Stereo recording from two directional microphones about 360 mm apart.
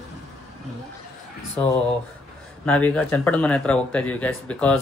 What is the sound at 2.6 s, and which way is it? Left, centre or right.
Speech, centre.